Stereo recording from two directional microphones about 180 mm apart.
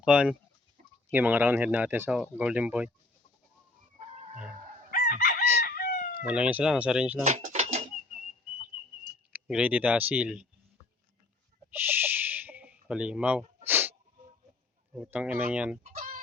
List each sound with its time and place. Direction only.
0.0 s speech: 5° right (ahead or behind)
4.9 s chicken: 50° left (ahead or behind)
6.1 s speech: 5° right (ahead or behind)
7.3 s bird: 40° right (ahead or behind)
9.3 s speech: 5° right (ahead or behind)
11.7 s owl: 10° right (ahead or behind)
13.7 s sneeze: 10° right (ahead or behind)
14.9 s speech: 5° right (ahead or behind)
15.8 s chicken: 50° right (ahead or behind)